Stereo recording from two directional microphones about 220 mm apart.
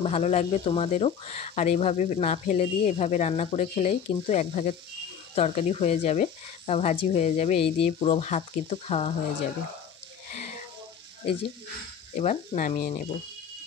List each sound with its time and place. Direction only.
0.0 s speech: 30° left (ahead or behind)
10.3 s a sound: 30° left (ahead or behind)
12.2 s speech: 35° left (ahead or behind)